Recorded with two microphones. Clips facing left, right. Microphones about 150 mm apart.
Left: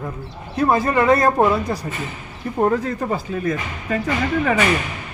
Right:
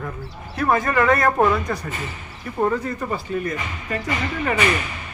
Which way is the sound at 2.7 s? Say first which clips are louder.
Left 3 dB; 90° left.